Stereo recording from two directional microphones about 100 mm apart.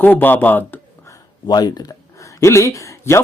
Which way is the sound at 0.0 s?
20° left (ahead or behind).